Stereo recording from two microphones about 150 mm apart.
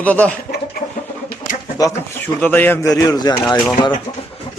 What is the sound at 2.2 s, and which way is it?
Speech, 15° left (ahead or behind).